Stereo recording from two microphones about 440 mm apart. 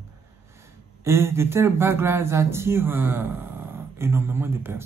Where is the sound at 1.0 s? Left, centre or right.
Centre.